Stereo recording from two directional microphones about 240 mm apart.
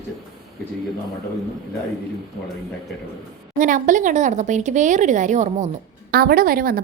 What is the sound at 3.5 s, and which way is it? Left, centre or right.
A woman's voice, right.